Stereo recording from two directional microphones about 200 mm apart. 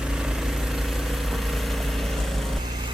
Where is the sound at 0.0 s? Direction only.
5° right (ahead or behind).